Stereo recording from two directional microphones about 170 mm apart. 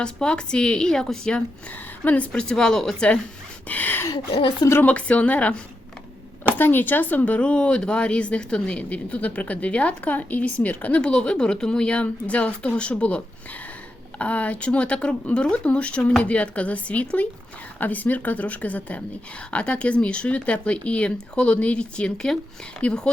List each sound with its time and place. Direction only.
0.0 s a woman's voice: 5° left (ahead or behind)
4.1 s speech: 25° left (ahead or behind)
4.7 s a woman's voice: 10° left (ahead or behind)
6.6 s a woman's voice: 10° left (ahead or behind)